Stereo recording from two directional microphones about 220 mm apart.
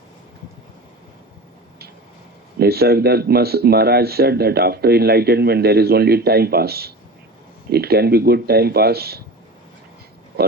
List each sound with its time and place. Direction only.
2.6 s speech: 45° right (ahead or behind)